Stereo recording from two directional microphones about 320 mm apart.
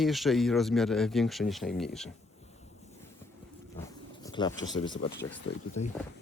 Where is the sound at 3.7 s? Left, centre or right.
Centre.